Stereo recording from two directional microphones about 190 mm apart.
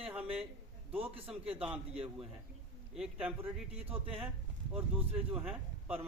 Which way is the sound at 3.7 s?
30° right (ahead or behind).